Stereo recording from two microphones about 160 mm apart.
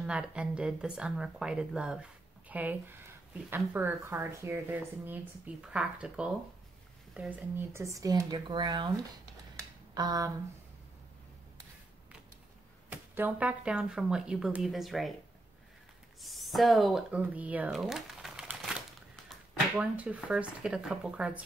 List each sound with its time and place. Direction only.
0.0 s speech: 5° right (ahead or behind); by 8.9 s 25° right (ahead or behind)
9.9 s speech: 25° right (ahead or behind)
12.9 s speech: 10° right (ahead or behind)
16.2 s speech: centre (ahead or behind)
19.8 s speech: 10° right (ahead or behind)